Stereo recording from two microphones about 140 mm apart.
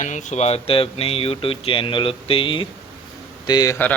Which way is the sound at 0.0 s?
60° left (ahead or behind).